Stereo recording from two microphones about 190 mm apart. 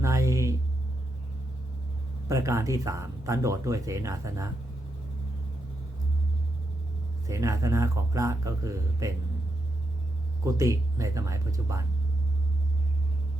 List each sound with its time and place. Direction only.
0.0 s a sound: 15° right (ahead or behind)
2.3 s speech: 15° right (ahead or behind)
7.3 s speech: 15° right (ahead or behind)
10.4 s speech: 15° right (ahead or behind)